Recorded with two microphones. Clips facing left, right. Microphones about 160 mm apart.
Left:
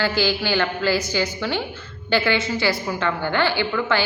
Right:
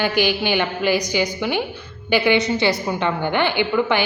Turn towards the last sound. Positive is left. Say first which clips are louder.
# right 3 dB
turn(degrees=-15)  # may be behind; listen again after turning